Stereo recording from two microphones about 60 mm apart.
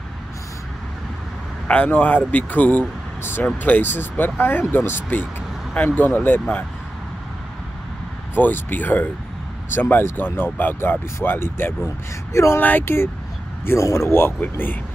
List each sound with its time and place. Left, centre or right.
1.9 s speech: left
3.8 s speech: left
8.4 s speech: left
12.6 s speech: left